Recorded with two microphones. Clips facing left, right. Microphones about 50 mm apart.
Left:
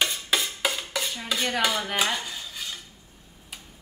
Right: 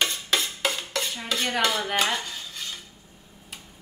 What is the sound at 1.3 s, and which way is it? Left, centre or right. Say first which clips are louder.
Cutlery: even; centre.